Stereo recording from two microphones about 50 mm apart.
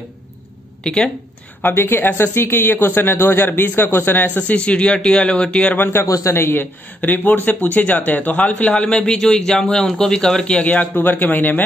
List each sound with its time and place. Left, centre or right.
0.8 s a man's voice: centre
1.6 s speech: left
4.3 s speech: left
6.3 s speech: left
8.5 s a man's voice: left
11.0 s speech: left